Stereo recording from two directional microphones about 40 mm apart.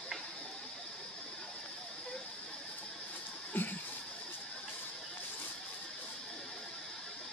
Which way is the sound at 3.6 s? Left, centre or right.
Left.